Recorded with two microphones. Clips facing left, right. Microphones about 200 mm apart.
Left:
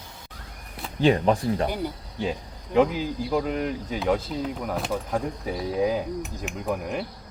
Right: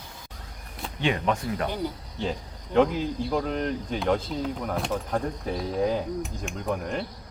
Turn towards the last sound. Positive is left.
turn(degrees=5)  # may be behind; listen again after turning